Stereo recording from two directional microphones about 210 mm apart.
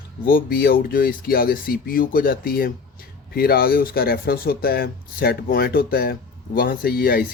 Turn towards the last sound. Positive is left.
turn(degrees=45)  # may be behind; listen again after turning